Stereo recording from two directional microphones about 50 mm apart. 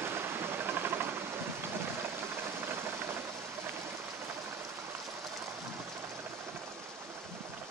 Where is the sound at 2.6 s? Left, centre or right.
Right.